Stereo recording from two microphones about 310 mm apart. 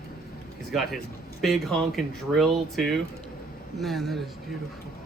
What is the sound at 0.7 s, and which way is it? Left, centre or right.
Speech, centre.